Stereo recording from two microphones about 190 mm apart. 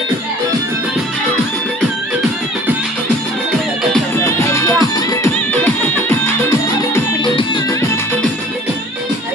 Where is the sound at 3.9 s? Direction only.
15° left (ahead or behind).